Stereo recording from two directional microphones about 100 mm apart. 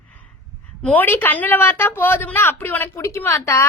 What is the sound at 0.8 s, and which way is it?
A woman's voice, 15° left (ahead or behind).